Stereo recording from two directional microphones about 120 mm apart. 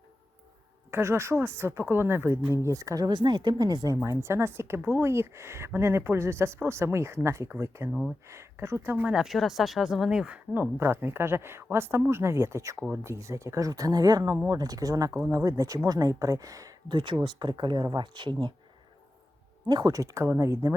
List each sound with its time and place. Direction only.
0.9 s speech: 20° right (ahead or behind)
9.1 s speech: centre (ahead or behind); by 18.5 s 40° right (ahead or behind)
19.6 s speech: 35° right (ahead or behind)